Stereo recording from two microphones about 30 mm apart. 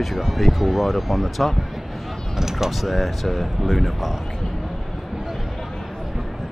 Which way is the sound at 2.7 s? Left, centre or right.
Centre.